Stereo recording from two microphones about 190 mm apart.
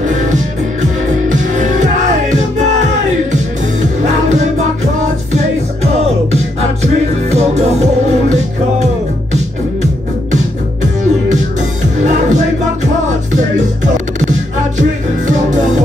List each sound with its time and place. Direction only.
1.3 s music: 40° right (ahead or behind)
4.0 s music: 40° right (ahead or behind)
6.3 s music: 35° right (ahead or behind)
10.3 s music: 40° right (ahead or behind)
14.8 s music: 40° right (ahead or behind)